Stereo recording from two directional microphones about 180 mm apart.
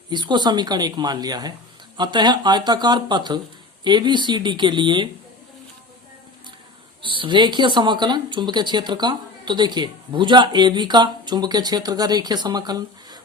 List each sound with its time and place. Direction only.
0.1 s speech: 25° right (ahead or behind)
7.0 s speech: 30° right (ahead or behind)